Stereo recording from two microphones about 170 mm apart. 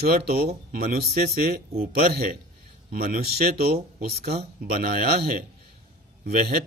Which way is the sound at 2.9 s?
60° right (ahead or behind).